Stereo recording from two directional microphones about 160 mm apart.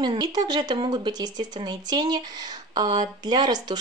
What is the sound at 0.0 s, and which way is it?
A woman's voice, 25° right (ahead or behind).